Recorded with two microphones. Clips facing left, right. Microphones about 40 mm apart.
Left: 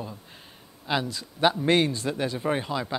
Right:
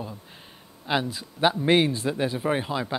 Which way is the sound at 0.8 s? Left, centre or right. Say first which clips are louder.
Right 2 dB; centre.